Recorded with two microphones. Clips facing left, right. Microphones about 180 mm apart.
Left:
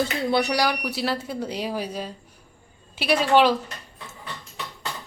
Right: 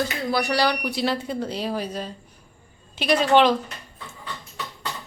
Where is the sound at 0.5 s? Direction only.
10° left (ahead or behind).